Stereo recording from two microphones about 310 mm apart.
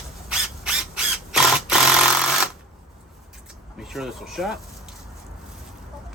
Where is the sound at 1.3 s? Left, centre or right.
Centre.